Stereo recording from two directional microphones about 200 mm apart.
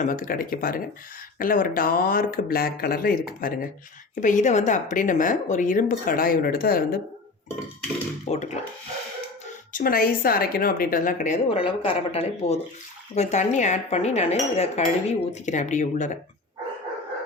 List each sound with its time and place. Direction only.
0.0 s speech: 45° left (ahead or behind)
8.3 s speech: 35° left (ahead or behind)
9.7 s speech: 45° left (ahead or behind)
11.4 s speech: 25° left (ahead or behind)